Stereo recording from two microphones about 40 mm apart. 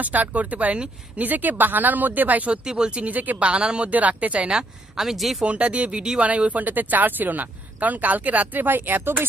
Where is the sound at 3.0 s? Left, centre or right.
Right.